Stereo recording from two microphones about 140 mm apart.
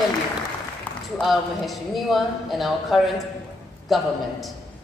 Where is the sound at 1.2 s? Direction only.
Centre (ahead or behind).